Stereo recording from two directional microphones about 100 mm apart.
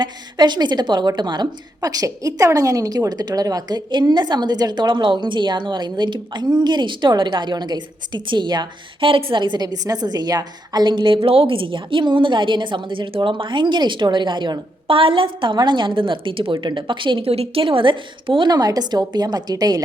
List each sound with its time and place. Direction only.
0.0 s a woman's voice: 50° right (ahead or behind)